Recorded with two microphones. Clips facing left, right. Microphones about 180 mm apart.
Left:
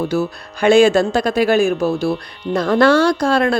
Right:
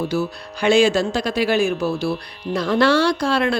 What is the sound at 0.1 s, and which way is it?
Speech, 50° left (ahead or behind).